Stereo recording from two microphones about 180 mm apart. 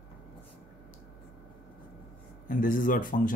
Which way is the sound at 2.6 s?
50° left (ahead or behind).